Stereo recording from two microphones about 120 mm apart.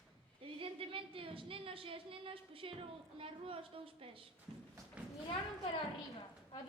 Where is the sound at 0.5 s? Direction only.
50° right (ahead or behind).